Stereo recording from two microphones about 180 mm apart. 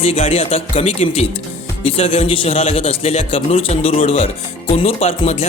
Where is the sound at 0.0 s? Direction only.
30° left (ahead or behind).